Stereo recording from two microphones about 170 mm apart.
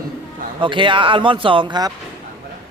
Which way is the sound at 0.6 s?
30° right (ahead or behind).